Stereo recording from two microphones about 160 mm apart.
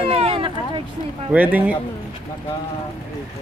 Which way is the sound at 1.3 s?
10° right (ahead or behind).